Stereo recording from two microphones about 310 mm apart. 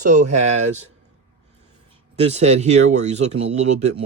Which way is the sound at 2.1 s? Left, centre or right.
Right.